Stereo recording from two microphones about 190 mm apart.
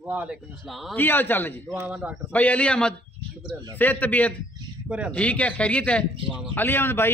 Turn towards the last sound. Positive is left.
turn(degrees=10)  # may be behind; listen again after turning